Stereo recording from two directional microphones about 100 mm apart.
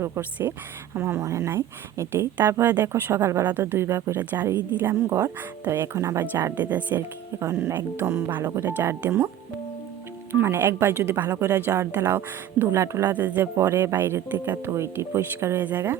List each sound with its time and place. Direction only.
0.0 s speech: 30° right (ahead or behind)
10.3 s speech: 25° right (ahead or behind)
13.1 s speech: 15° right (ahead or behind)
13.6 s speech: 30° right (ahead or behind)